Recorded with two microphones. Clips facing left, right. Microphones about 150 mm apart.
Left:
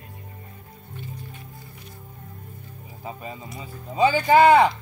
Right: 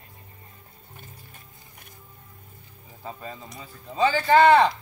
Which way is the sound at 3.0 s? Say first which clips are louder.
Left 2 dB; 15° left (ahead or behind).